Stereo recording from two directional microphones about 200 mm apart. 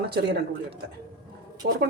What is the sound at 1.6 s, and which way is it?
Speech, 55° right (ahead or behind).